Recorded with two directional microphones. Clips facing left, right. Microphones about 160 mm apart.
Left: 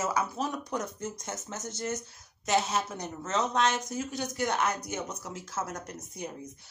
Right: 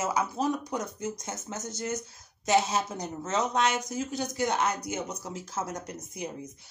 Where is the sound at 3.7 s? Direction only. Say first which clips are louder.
Right 2 dB; 15° right (ahead or behind).